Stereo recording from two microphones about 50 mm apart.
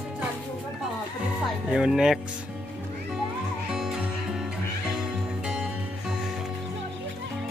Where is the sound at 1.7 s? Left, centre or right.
Centre.